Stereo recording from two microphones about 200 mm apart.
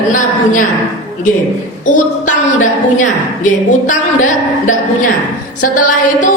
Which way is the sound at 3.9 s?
40° left (ahead or behind).